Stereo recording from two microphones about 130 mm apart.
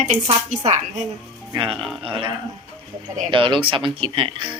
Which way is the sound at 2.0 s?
45° right (ahead or behind).